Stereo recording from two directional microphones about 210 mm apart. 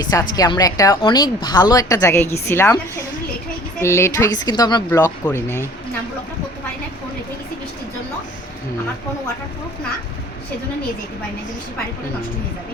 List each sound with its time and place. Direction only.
0.0 s a woman's voice: 15° left (ahead or behind)
3.8 s a woman's voice: 10° left (ahead or behind)